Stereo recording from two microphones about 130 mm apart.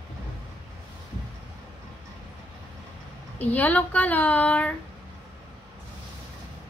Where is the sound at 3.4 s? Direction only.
10° left (ahead or behind).